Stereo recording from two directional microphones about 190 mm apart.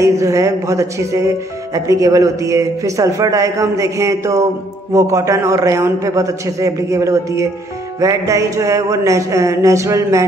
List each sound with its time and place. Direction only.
0.0 s speech: 15° right (ahead or behind)